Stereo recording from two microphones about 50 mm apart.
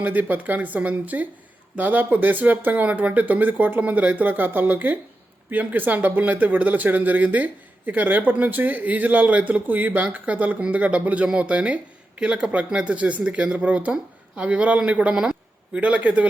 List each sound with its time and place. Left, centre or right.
0.0 s a man's voice: right; by 15.4 s centre
15.7 s speech: right